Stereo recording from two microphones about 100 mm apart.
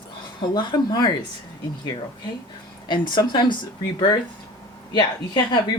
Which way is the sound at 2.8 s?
50° left (ahead or behind).